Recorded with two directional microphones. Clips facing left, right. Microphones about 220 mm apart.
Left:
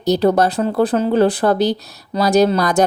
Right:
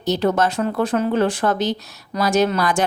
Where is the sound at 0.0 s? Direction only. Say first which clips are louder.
Left 4 dB; 35° left (ahead or behind).